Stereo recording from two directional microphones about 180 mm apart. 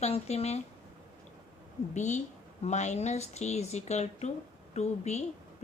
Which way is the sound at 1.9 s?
40° left (ahead or behind).